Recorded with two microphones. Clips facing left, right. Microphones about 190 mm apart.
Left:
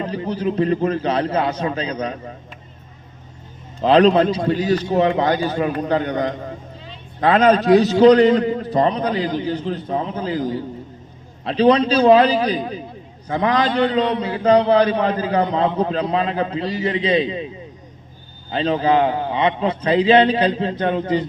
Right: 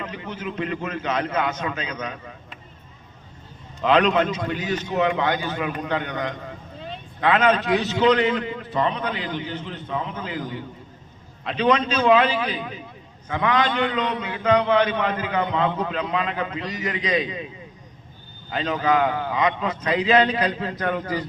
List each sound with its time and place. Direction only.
0.0 s a man's voice: 35° left (ahead or behind)
3.8 s a man's voice: 35° left (ahead or behind)
18.5 s a man's voice: 30° left (ahead or behind)